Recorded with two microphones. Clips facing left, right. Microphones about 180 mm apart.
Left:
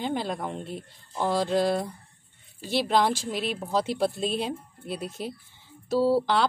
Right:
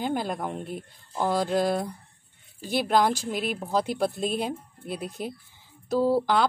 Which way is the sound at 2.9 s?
Centre (ahead or behind).